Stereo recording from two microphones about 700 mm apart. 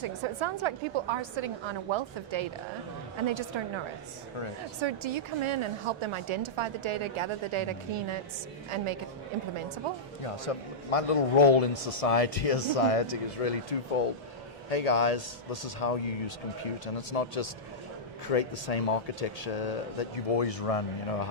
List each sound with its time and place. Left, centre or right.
0.0 s a woman's voice: right
4.8 s a woman's voice: right
10.5 s a man's voice: left